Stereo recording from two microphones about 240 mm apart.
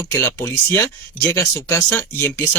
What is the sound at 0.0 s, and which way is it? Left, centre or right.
Speech, centre.